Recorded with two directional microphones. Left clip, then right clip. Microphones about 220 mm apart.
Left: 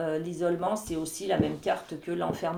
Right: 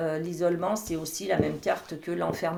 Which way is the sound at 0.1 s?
30° right (ahead or behind).